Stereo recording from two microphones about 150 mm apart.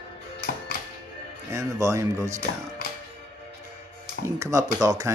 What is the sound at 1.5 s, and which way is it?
Speech, 20° right (ahead or behind).